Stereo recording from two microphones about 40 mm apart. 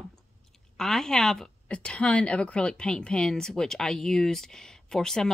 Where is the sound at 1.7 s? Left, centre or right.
Left; by 5.3 s centre.